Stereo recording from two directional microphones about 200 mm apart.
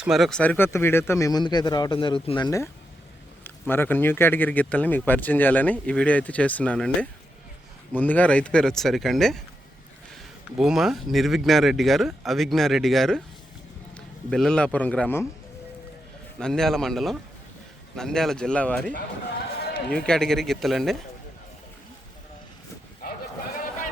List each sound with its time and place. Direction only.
0.0 s speech: centre (ahead or behind)
10.6 s a man's voice: centre (ahead or behind)
16.4 s speech: centre (ahead or behind)
19.9 s speech: 5° left (ahead or behind)
23.0 s a sound: 50° left (ahead or behind)